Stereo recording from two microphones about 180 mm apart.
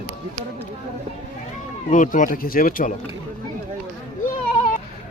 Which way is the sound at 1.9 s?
45° left (ahead or behind).